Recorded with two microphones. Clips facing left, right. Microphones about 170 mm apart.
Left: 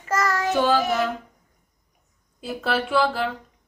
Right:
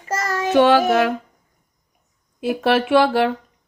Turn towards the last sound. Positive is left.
turn(degrees=-75)  # may be behind; listen again after turning